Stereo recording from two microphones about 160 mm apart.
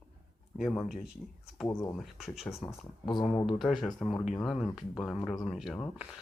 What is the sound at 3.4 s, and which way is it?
Speech, centre (ahead or behind).